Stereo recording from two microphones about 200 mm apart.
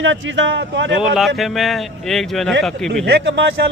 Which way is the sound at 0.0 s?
70° right (ahead or behind).